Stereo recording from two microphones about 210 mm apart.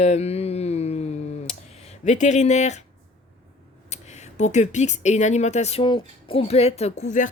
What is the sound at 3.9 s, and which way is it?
Speech, 35° left (ahead or behind).